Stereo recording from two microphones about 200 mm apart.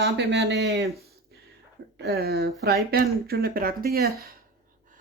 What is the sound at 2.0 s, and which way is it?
Speech, 55° right (ahead or behind).